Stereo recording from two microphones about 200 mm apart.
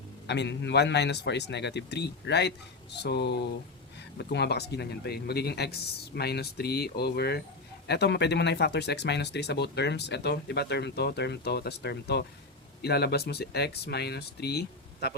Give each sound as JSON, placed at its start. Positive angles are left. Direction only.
{"t": 0.3, "sound": "speech", "side_deg": 60}